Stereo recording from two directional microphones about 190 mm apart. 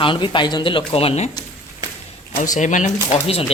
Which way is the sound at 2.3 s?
40° left (ahead or behind).